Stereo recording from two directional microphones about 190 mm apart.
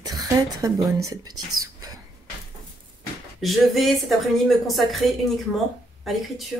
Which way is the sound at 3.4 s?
Centre (ahead or behind).